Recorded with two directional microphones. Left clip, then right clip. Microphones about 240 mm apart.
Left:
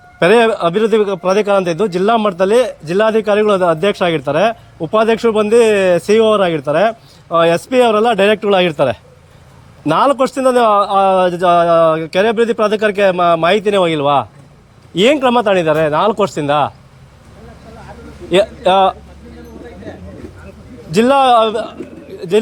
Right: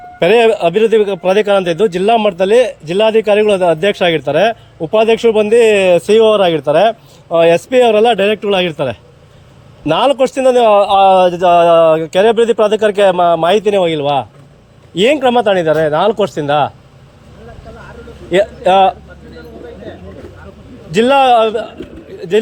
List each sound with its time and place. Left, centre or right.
0.2 s a man's voice: centre
18.3 s a man's voice: centre
20.9 s a man's voice: centre